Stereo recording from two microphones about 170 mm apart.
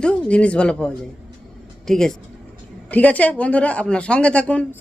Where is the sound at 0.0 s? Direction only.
5° left (ahead or behind).